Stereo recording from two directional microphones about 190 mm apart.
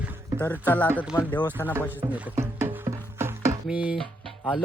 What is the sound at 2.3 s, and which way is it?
Music, 15° right (ahead or behind).